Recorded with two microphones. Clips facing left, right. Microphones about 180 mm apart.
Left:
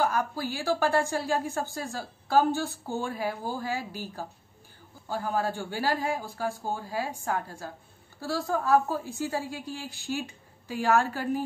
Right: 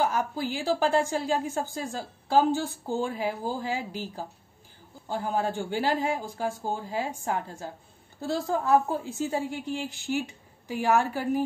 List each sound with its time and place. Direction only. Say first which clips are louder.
0.2 s a woman's voice: right 1 dB; 20° right (ahead or behind)
5.0 s a woman's voice: right 1 dB; 20° right (ahead or behind)